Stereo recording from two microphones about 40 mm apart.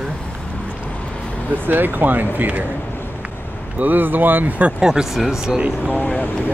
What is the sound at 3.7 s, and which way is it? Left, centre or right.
Speech, right.